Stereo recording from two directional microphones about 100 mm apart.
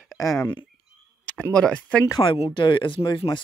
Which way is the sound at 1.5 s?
10° left (ahead or behind).